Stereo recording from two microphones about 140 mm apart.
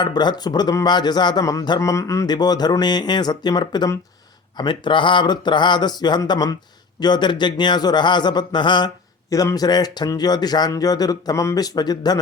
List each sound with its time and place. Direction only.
0.0 s speech: 30° left (ahead or behind)